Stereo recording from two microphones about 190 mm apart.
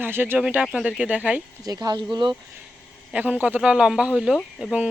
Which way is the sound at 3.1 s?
10° right (ahead or behind).